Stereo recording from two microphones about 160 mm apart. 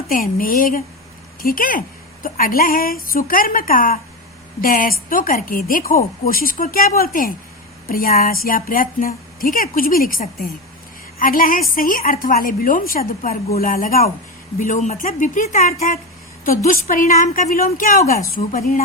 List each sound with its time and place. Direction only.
0.1 s a woman's voice: 60° left (ahead or behind)
14.6 s a woman's voice: 50° left (ahead or behind)